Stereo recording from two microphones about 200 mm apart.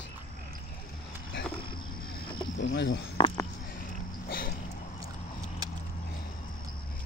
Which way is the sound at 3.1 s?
20° left (ahead or behind).